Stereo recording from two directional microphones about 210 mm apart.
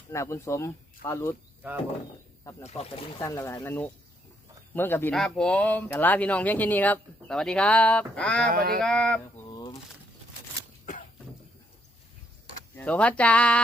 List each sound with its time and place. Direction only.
0.1 s speech: 15° left (ahead or behind)
2.4 s speech: 15° left (ahead or behind)
2.6 s speech: 30° left (ahead or behind)
3.2 s speech: 15° left (ahead or behind)
8.4 s speech: 45° right (ahead or behind)
8.8 s speech: 5° left (ahead or behind)
9.5 s a sound: 20° left (ahead or behind)
12.7 s speech: 5° left (ahead or behind)